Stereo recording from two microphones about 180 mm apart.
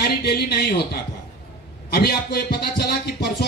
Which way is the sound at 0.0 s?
60° left (ahead or behind).